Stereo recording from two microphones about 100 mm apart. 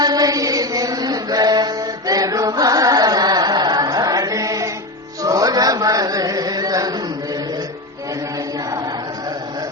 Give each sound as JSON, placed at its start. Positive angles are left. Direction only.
{"t": 0.0, "sound": "chant", "side_deg": -40}